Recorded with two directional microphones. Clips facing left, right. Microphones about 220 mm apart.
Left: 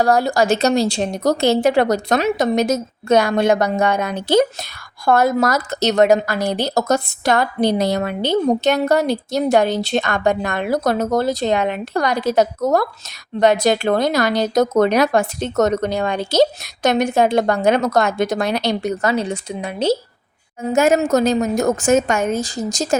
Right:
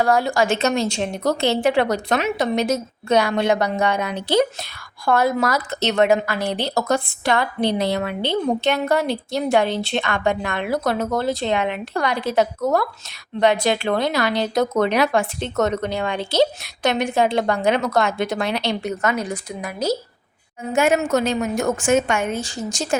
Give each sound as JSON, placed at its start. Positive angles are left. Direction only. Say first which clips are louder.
{"t": 0.0, "sound": "a woman's voice", "louder": "left 3 dB", "side_deg": 40}
{"t": 20.7, "sound": "a woman's voice", "louder": "left 3 dB", "side_deg": 40}